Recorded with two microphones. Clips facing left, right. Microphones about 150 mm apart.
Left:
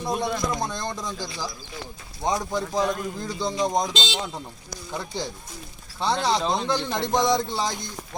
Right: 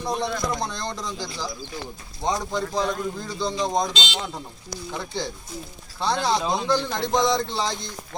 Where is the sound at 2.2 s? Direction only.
15° left (ahead or behind).